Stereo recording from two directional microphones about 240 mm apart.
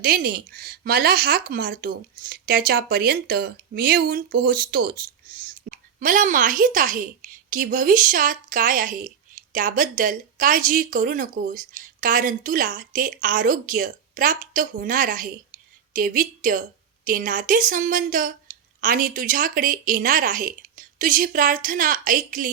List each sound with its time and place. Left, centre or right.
0.0 s speech: right